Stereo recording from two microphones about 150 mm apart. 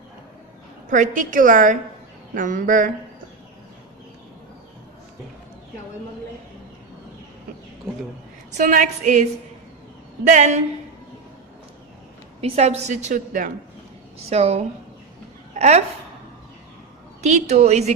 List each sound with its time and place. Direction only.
0.9 s a woman's voice: 60° right (ahead or behind)
8.5 s a woman's voice: 55° right (ahead or behind)
10.2 s a woman's voice: 55° right (ahead or behind)
12.4 s a woman's voice: 45° right (ahead or behind)
14.3 s a woman's voice: 45° right (ahead or behind)
17.2 s a woman's voice: 45° right (ahead or behind)